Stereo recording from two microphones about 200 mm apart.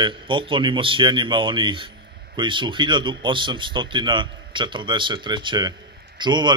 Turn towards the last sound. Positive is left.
turn(degrees=-20)  # may be behind; listen again after turning